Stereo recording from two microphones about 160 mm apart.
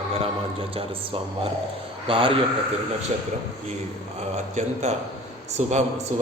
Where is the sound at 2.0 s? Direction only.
35° right (ahead or behind).